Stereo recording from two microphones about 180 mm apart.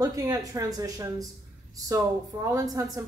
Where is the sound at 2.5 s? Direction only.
20° right (ahead or behind).